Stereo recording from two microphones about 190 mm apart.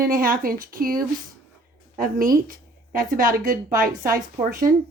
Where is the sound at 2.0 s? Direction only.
45° right (ahead or behind).